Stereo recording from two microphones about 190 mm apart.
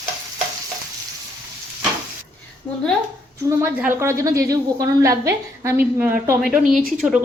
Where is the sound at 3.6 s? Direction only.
10° right (ahead or behind).